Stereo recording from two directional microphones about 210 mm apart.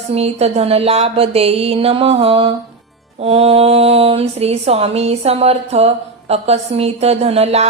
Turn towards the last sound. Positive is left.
turn(degrees=-30)  # may be behind; listen again after turning